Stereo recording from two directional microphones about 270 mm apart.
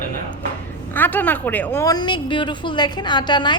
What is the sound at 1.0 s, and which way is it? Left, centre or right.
A woman's voice, centre.